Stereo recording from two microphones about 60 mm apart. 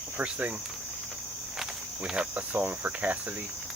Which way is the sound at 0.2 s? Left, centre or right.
Right.